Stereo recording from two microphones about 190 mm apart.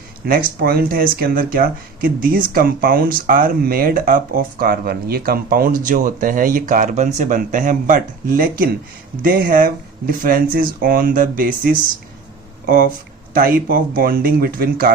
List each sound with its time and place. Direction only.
0.3 s speech: 50° right (ahead or behind)